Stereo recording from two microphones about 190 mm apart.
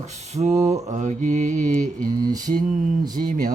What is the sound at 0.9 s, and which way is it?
Mantra, 40° right (ahead or behind).